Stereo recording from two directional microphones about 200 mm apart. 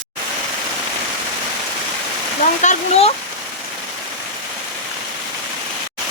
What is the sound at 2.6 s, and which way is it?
Speech, 35° left (ahead or behind).